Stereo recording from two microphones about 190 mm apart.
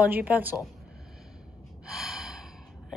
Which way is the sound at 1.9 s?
Centre (ahead or behind).